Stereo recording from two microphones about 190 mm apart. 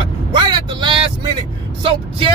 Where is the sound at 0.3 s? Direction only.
25° right (ahead or behind).